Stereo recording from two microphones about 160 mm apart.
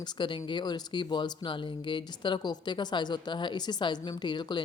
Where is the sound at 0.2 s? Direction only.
30° left (ahead or behind).